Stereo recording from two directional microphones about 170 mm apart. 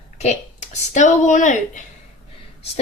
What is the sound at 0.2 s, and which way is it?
Speech, 40° left (ahead or behind).